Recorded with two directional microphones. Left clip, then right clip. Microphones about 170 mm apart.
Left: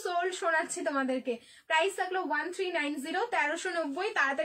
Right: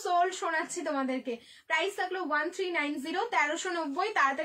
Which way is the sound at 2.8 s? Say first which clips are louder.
Even; 15° right (ahead or behind).